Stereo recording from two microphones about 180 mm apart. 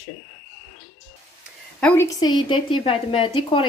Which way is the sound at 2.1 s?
25° left (ahead or behind).